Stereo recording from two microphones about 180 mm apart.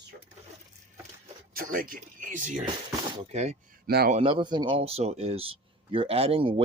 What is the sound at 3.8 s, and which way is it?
Speech, 60° right (ahead or behind).